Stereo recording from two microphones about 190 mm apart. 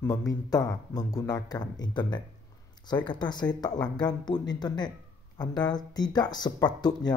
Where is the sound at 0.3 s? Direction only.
20° left (ahead or behind).